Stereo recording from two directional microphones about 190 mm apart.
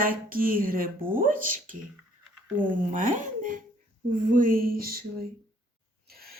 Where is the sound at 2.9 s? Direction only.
45° right (ahead or behind).